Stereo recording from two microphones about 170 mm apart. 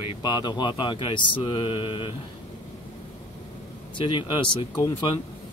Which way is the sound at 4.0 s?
30° left (ahead or behind).